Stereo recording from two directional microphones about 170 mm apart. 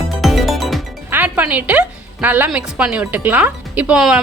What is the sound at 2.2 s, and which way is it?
Speech, 10° right (ahead or behind).